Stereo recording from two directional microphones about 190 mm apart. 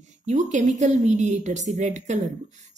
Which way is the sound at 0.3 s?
40° right (ahead or behind).